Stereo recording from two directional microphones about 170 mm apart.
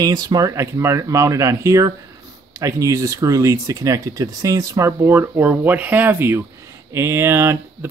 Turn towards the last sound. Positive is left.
turn(degrees=-15)  # may be behind; listen again after turning